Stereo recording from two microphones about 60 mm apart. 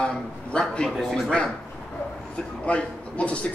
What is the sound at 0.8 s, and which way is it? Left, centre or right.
A man's voice, centre.